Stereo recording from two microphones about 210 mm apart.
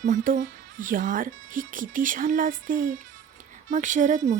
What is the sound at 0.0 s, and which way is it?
A woman's voice, 40° right (ahead or behind).